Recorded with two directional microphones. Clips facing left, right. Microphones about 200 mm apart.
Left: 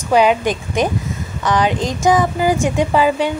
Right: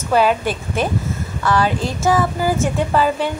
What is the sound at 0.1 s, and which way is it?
A woman's voice, 15° left (ahead or behind).